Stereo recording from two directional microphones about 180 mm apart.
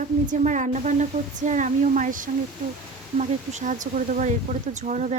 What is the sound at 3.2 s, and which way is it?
Speech, 45° right (ahead or behind).